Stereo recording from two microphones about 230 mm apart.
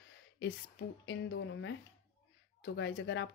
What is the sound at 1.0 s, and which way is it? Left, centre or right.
Speech, left.